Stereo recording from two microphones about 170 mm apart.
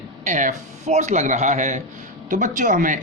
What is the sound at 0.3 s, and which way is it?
Speech, 45° right (ahead or behind).